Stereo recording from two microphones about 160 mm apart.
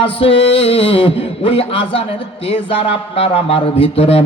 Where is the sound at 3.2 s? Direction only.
35° left (ahead or behind).